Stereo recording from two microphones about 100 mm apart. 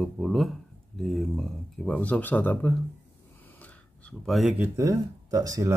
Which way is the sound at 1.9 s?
15° left (ahead or behind).